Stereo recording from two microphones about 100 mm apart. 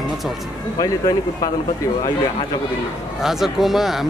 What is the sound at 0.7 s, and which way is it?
Speech, 40° left (ahead or behind).